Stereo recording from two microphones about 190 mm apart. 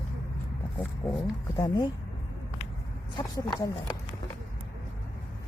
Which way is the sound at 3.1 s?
20° left (ahead or behind).